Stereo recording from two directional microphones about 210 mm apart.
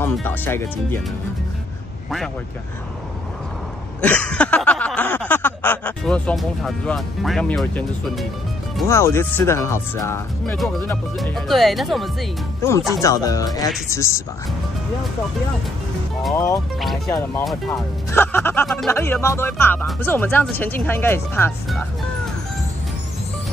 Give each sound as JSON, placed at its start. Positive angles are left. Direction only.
{"t": 0.0, "sound": "speech", "side_deg": 10}
{"t": 4.0, "sound": "a sound", "side_deg": 5}
{"t": 8.8, "sound": "speech", "side_deg": 15}
{"t": 12.6, "sound": "speech", "side_deg": 10}
{"t": 16.3, "sound": "speech", "side_deg": 15}